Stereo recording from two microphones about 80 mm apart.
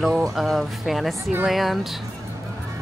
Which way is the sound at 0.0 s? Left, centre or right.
Centre.